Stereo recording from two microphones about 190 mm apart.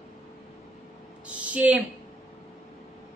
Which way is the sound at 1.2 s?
5° right (ahead or behind).